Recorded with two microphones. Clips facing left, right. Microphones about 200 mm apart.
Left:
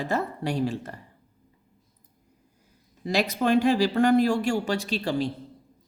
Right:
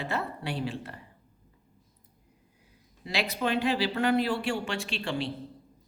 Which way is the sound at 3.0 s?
45° left (ahead or behind).